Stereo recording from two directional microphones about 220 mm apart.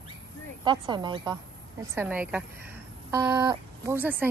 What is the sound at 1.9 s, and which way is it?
A woman's voice, 10° right (ahead or behind).